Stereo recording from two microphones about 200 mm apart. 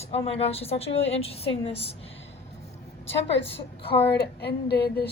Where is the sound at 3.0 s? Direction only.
60° left (ahead or behind).